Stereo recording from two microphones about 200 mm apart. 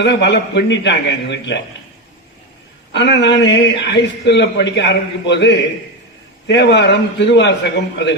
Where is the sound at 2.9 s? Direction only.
60° left (ahead or behind).